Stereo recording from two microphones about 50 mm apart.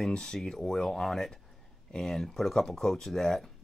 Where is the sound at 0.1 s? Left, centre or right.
Centre.